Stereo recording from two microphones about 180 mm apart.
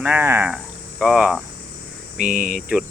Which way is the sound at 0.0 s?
10° right (ahead or behind).